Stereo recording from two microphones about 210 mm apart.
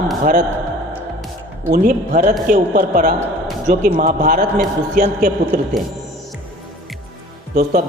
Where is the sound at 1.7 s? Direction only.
40° right (ahead or behind).